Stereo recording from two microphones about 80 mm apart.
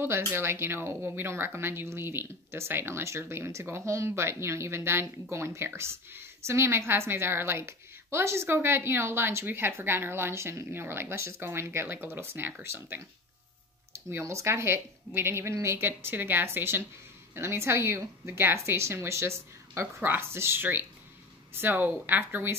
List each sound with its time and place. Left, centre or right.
0.3 s a woman's voice: right